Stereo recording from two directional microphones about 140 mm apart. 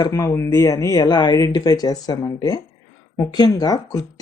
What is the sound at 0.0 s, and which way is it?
Speech, 25° left (ahead or behind).